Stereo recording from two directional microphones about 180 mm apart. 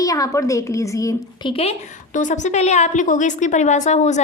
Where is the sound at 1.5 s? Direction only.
30° left (ahead or behind).